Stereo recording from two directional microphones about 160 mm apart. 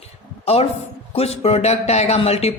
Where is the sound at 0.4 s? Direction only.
40° left (ahead or behind).